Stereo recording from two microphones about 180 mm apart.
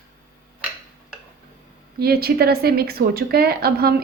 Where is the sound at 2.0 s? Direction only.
60° right (ahead or behind).